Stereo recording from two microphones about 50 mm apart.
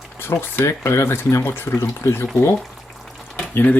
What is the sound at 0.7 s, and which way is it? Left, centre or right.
Speech, left.